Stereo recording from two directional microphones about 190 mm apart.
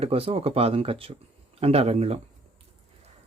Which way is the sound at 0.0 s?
30° right (ahead or behind).